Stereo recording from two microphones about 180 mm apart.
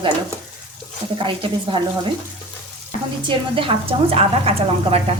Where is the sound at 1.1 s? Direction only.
30° right (ahead or behind).